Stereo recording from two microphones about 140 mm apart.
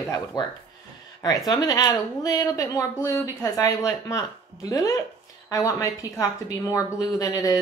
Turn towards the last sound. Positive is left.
turn(degrees=25)  # may be behind; listen again after turning